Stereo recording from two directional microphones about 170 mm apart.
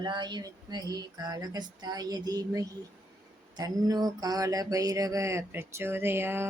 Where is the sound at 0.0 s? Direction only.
25° right (ahead or behind).